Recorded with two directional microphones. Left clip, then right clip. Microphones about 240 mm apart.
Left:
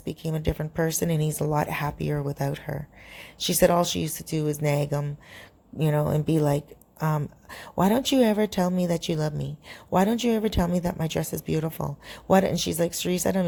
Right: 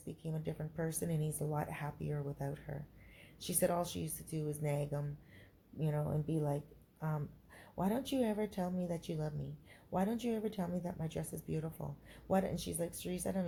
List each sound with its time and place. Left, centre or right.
0.0 s speech: left